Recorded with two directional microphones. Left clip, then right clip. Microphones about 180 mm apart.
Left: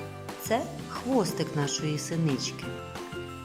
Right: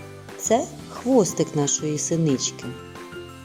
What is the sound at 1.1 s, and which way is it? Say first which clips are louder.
Speech: right 8 dB; 20° right (ahead or behind).